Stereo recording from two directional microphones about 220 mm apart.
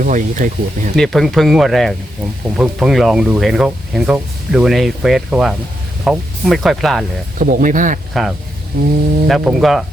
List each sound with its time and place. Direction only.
0.0 s speech: 35° right (ahead or behind)
0.9 s speech: centre (ahead or behind)
7.3 s speech: 35° right (ahead or behind)
8.1 s speech: centre (ahead or behind)
8.7 s speech: 40° right (ahead or behind)
9.2 s speech: centre (ahead or behind)